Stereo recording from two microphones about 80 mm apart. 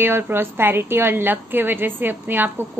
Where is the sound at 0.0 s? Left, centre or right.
Right.